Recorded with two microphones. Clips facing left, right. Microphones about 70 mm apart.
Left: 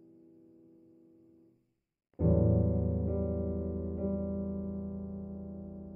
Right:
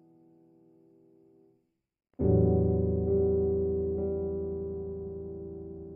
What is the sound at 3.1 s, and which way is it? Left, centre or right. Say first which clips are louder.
Music: right 9 dB; centre.